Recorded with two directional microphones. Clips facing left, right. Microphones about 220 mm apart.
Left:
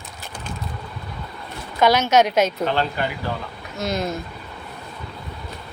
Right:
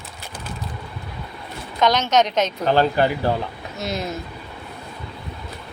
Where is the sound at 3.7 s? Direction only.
Centre (ahead or behind).